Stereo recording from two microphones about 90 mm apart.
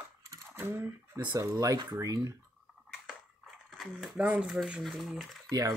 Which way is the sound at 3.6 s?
5° left (ahead or behind).